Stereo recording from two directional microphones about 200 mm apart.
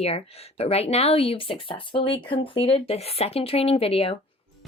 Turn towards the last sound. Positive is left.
turn(degrees=30)  # may be behind; listen again after turning